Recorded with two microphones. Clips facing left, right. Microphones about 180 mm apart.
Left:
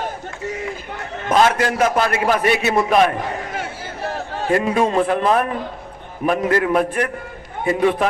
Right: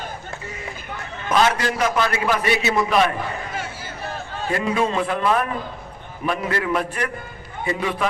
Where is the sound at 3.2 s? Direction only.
70° left (ahead or behind).